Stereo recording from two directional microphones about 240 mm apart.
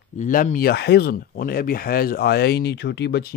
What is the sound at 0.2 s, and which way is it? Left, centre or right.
Speech, left.